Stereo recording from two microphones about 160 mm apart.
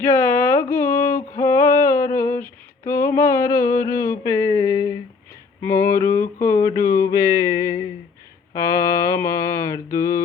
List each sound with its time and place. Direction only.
0.0 s carnatic music: 10° left (ahead or behind)
1.4 s female singing: 15° left (ahead or behind)
5.6 s a sound: 15° left (ahead or behind)
8.5 s mantra: 20° left (ahead or behind)